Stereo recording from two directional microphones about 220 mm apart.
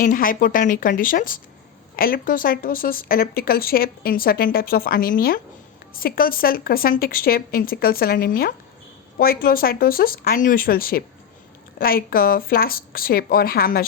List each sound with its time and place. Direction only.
0.0 s speech: 40° left (ahead or behind)